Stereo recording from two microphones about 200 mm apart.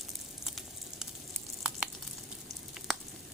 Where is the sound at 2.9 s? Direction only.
Centre (ahead or behind).